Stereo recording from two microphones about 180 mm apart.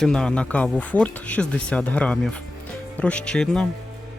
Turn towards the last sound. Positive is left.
turn(degrees=5)  # may be behind; listen again after turning